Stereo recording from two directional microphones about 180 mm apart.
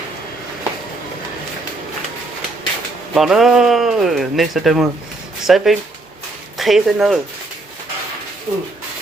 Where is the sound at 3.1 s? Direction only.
Centre (ahead or behind).